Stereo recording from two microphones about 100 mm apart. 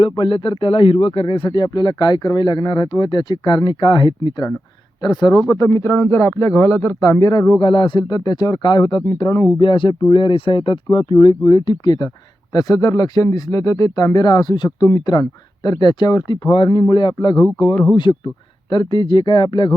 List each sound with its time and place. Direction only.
0.0 s speech: 60° left (ahead or behind)
5.6 s speech: 25° left (ahead or behind); by 7.6 s 40° left (ahead or behind)
7.6 s speech: 55° left (ahead or behind)
9.6 s speech: 55° left (ahead or behind)
17.2 s speech: 40° left (ahead or behind)
17.9 s speech: 55° left (ahead or behind)